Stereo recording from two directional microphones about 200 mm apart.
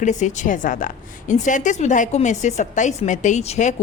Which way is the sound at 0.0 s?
35° left (ahead or behind).